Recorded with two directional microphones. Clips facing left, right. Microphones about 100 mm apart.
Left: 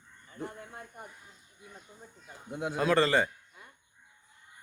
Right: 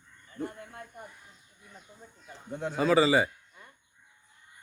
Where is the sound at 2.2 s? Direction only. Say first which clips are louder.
Even; 10° left (ahead or behind).